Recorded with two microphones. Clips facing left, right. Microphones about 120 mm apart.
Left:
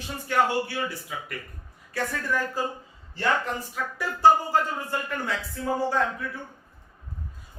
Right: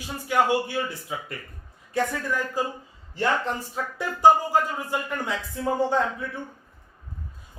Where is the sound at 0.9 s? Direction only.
25° right (ahead or behind).